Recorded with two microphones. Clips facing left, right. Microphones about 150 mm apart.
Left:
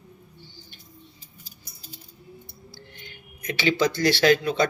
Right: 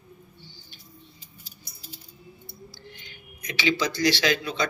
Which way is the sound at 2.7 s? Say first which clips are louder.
Left 1 dB; 50° left (ahead or behind).